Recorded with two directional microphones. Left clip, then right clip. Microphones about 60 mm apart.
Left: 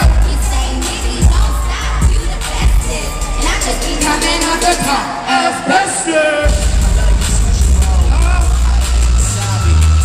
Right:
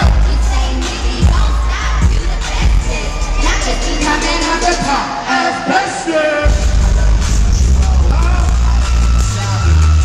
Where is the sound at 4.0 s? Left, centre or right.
Left.